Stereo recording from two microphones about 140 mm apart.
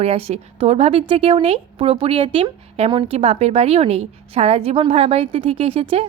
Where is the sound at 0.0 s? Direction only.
45° right (ahead or behind).